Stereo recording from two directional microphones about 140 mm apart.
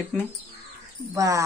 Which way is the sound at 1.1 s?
25° right (ahead or behind).